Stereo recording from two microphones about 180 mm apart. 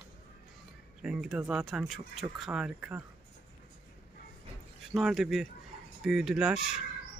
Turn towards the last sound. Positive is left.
turn(degrees=-5)  # may be behind; listen again after turning